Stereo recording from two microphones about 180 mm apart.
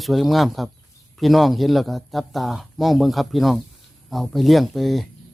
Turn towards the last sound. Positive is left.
turn(degrees=0)  # may be behind; listen again after turning